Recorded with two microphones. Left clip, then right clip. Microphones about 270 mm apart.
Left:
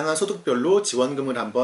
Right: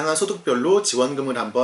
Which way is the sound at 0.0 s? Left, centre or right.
Centre.